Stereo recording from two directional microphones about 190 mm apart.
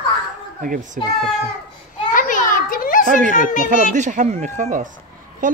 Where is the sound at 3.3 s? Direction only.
45° left (ahead or behind).